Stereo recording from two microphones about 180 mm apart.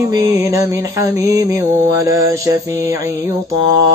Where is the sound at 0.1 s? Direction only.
20° right (ahead or behind).